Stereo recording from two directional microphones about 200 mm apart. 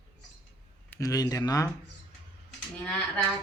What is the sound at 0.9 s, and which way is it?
Speech, 15° left (ahead or behind).